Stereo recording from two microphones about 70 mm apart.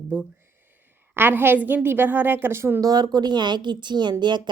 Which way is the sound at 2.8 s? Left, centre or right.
Right.